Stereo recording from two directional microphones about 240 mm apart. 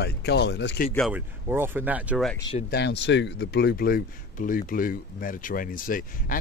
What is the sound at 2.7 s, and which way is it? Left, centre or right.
Speech, left.